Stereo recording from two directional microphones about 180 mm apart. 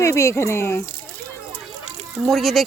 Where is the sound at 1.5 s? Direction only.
35° right (ahead or behind).